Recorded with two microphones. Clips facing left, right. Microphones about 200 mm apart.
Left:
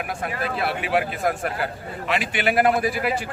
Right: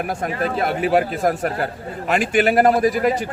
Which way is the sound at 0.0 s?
40° right (ahead or behind).